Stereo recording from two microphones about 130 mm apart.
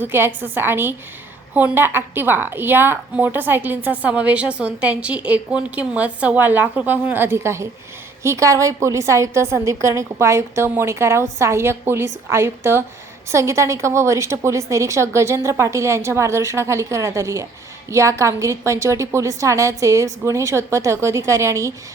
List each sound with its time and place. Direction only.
0.0 s a woman's voice: 15° right (ahead or behind)